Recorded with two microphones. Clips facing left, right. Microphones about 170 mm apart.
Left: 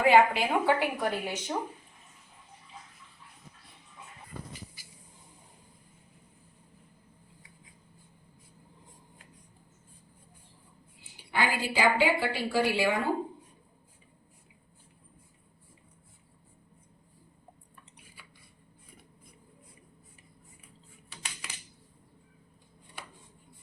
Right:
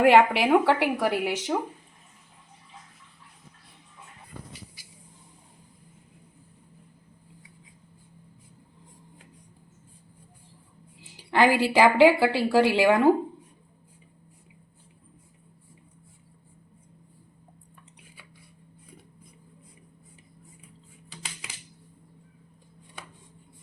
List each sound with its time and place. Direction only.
0.0 s a woman's voice: 70° right (ahead or behind); by 1.5 s 90° right
11.0 s a woman's voice: 90° right